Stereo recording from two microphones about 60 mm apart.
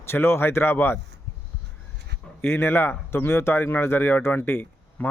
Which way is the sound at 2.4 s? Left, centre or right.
Left.